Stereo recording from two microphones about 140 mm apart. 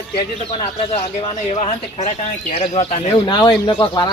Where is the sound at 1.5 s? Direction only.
55° left (ahead or behind).